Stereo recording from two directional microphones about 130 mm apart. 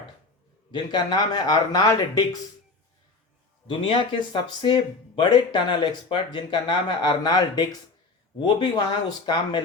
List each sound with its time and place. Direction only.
0.7 s speech: 35° left (ahead or behind)
3.7 s speech: 40° left (ahead or behind)